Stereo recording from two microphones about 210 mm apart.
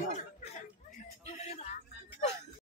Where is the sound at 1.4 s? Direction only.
30° left (ahead or behind).